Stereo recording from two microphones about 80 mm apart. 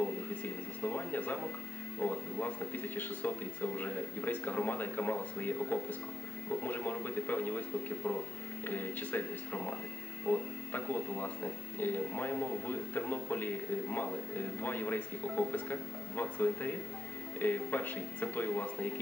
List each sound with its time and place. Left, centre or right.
0.4 s music: left
2.0 s speech: left